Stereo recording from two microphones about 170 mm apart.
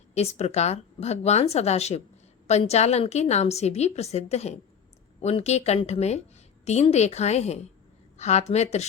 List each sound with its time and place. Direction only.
0.1 s a woman's voice: 40° left (ahead or behind)